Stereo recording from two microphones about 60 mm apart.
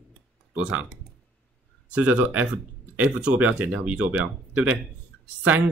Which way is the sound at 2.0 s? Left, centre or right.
Right.